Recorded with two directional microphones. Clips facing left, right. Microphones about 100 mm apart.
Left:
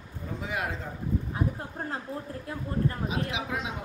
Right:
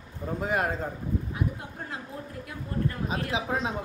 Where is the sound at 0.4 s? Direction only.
45° right (ahead or behind).